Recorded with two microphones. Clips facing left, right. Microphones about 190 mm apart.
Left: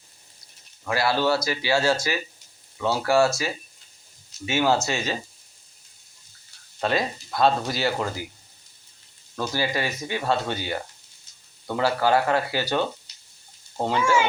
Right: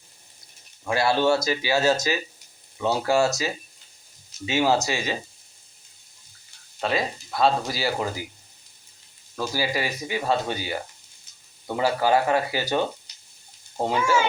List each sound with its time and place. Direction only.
0.9 s speech: 25° right (ahead or behind)
6.7 s speech: centre (ahead or behind)
9.3 s speech: 10° right (ahead or behind)